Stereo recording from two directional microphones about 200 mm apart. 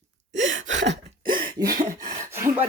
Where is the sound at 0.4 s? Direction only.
70° right (ahead or behind).